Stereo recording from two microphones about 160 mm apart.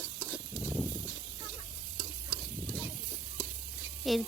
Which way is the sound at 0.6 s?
10° right (ahead or behind).